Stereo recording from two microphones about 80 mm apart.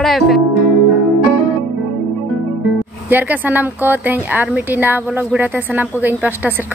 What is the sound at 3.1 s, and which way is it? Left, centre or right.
A woman's voice, right.